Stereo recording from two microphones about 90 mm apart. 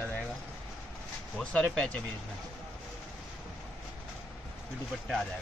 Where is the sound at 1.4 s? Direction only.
10° left (ahead or behind).